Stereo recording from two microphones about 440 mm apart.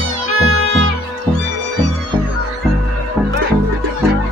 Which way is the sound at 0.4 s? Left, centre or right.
Right.